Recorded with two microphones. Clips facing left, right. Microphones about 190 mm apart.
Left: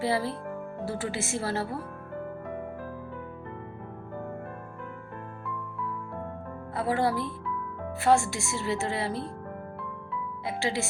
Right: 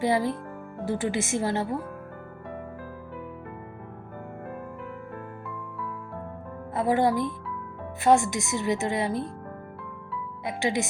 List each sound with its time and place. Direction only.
0.0 s a woman's voice: 20° right (ahead or behind)
6.7 s a woman's voice: 20° right (ahead or behind)
10.4 s speech: 20° right (ahead or behind)